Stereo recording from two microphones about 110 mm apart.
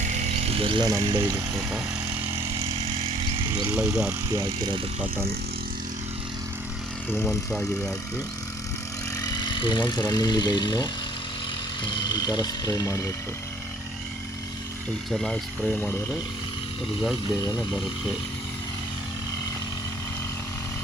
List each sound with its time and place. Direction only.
0.2 s electric shaver: 85° right; by 0.9 s 55° right (ahead or behind)
1.0 s speech: 35° right (ahead or behind)
2.6 s vehicle: 65° right (ahead or behind)
3.8 s speech: 10° right (ahead or behind)
4.4 s speech: 45° right (ahead or behind)
7.3 s speech: 5° left (ahead or behind)
9.2 s speech: 40° left (ahead or behind)
15.1 s speech: 5° left (ahead or behind)
17.3 s speech: 35° left (ahead or behind)